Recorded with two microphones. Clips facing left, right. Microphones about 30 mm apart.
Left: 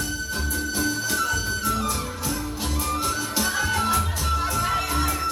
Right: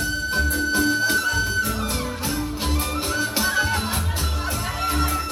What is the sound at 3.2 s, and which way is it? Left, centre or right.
Music, right.